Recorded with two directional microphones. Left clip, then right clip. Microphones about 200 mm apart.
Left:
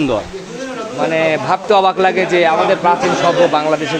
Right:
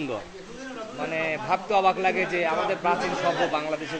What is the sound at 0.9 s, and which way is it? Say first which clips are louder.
A man's voice: left 14 dB; 20° left (ahead or behind).